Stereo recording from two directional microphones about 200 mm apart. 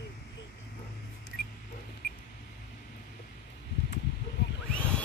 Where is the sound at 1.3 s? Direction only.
55° left (ahead or behind).